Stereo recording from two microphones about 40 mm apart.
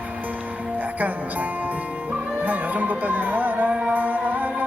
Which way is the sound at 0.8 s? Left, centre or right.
Right.